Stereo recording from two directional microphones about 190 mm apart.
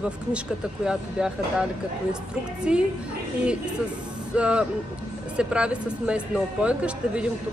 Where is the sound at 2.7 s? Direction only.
5° right (ahead or behind).